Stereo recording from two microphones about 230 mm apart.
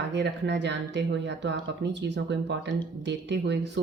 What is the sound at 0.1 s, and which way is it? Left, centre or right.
A woman's voice, right.